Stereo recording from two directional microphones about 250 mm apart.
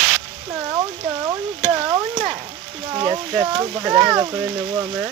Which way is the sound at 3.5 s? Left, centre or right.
Centre.